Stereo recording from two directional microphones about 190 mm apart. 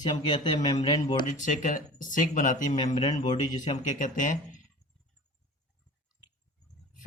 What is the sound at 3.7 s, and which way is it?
Speech, 45° left (ahead or behind).